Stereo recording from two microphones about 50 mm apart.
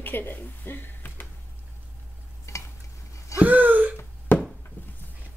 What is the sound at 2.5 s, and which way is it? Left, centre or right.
Stir, left.